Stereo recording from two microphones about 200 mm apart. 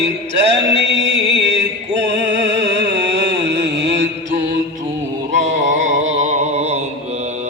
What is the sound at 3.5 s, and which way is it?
Mantra, 60° right (ahead or behind).